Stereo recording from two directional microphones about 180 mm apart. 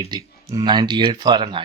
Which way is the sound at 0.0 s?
20° right (ahead or behind).